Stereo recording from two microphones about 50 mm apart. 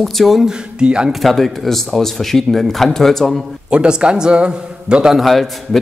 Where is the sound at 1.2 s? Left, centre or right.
Centre.